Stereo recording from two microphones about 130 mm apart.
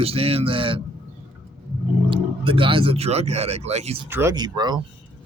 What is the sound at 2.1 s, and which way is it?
Speech, 40° right (ahead or behind).